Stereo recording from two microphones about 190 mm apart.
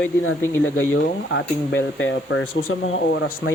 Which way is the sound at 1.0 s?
65° left (ahead or behind).